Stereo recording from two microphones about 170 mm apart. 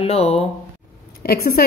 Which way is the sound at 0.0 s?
35° left (ahead or behind).